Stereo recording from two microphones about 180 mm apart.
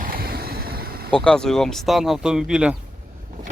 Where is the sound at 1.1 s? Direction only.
5° left (ahead or behind).